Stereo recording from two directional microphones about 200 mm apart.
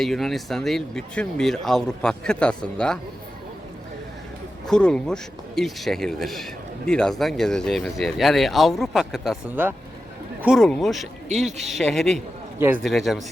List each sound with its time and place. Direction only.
0.0 s speech: centre (ahead or behind)
4.6 s speech: 5° left (ahead or behind)
12.5 s a man's voice: 10° right (ahead or behind)
12.8 s speech: centre (ahead or behind)